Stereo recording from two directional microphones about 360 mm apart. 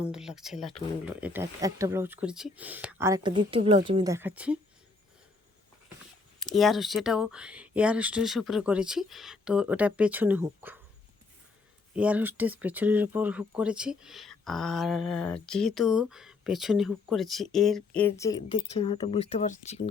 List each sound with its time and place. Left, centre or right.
0.0 s speech: centre
6.4 s speech: centre
11.9 s speech: centre